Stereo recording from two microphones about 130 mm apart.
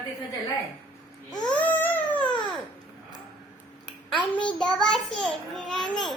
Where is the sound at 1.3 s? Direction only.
35° left (ahead or behind).